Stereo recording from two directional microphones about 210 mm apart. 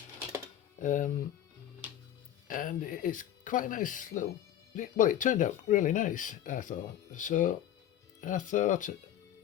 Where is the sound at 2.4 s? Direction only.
40° left (ahead or behind).